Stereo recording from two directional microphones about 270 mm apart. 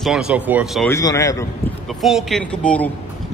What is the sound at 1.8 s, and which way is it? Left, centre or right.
A man's voice, centre.